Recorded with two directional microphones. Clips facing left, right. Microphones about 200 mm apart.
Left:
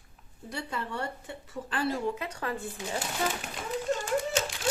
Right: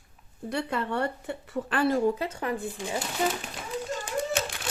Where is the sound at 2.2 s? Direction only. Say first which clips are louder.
Right 4 dB; 20° right (ahead or behind).